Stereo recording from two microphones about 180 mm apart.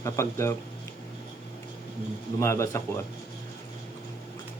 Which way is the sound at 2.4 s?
15° left (ahead or behind).